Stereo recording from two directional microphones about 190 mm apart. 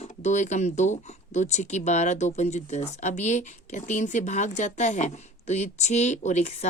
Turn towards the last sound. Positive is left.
turn(degrees=40)  # may be behind; listen again after turning